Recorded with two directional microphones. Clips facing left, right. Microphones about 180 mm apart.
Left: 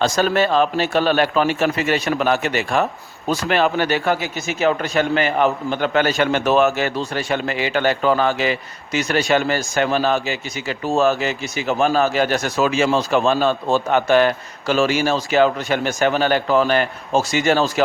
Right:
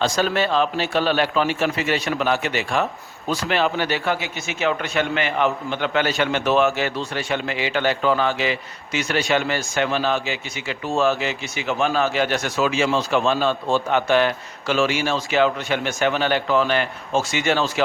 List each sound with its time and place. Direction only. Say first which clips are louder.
0.0 s a man's voice: left 3 dB; 45° left (ahead or behind)